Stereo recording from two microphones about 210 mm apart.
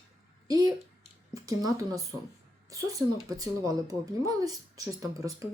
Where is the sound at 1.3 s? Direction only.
15° right (ahead or behind).